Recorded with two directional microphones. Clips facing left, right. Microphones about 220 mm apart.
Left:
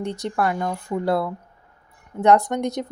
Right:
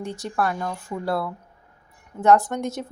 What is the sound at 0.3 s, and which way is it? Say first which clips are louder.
A woman's voice: left 2 dB; 20° left (ahead or behind).